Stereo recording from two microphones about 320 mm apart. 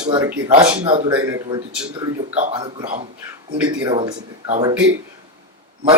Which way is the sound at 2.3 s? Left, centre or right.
Centre.